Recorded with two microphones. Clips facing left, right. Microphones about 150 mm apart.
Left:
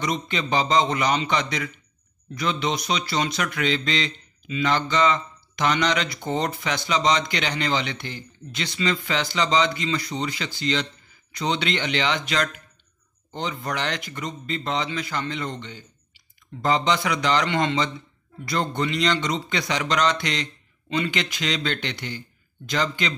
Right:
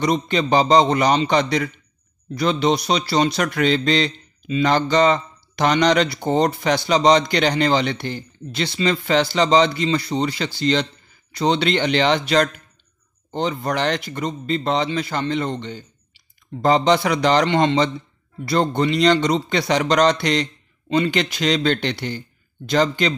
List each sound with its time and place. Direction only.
0.0 s speech: 35° right (ahead or behind)